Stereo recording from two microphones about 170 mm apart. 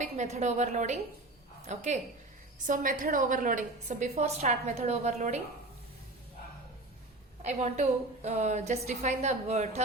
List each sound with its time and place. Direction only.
0.0 s a woman's voice: 45° right (ahead or behind)
7.4 s a woman's voice: 40° right (ahead or behind)